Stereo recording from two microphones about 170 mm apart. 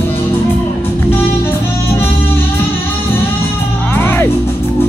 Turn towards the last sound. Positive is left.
turn(degrees=15)  # may be behind; listen again after turning